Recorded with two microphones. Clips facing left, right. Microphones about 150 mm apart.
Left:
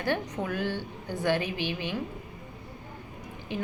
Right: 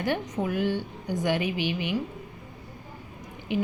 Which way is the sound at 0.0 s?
15° right (ahead or behind).